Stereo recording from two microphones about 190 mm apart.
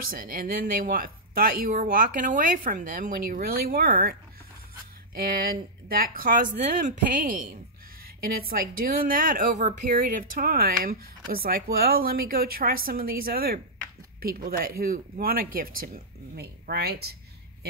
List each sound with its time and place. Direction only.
0.1 s speech: 50° right (ahead or behind)
5.1 s speech: 50° right (ahead or behind)